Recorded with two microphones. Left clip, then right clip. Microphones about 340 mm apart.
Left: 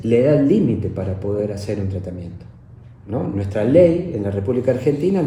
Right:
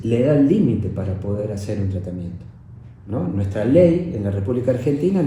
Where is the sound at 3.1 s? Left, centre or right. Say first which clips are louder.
Left 2 dB; left.